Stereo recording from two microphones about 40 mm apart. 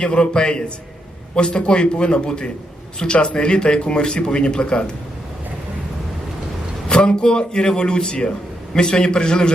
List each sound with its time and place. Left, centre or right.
0.0 s speech: left
6.8 s speech: left